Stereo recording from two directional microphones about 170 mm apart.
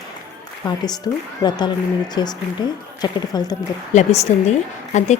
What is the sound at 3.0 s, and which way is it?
Speech, 20° left (ahead or behind).